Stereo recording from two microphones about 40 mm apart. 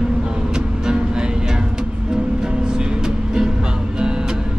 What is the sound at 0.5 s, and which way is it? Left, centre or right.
Music, centre.